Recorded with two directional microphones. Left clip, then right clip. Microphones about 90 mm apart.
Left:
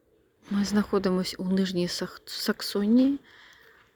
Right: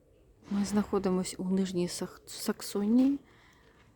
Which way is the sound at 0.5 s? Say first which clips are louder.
Left 5 dB; centre (ahead or behind).